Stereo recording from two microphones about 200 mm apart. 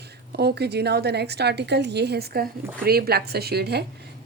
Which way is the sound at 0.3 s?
55° right (ahead or behind).